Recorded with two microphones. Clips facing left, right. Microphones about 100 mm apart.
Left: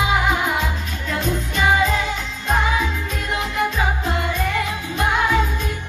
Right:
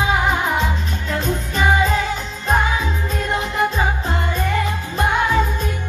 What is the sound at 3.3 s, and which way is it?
Music, 35° right (ahead or behind).